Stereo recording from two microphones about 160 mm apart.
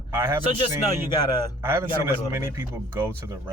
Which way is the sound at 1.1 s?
25° left (ahead or behind).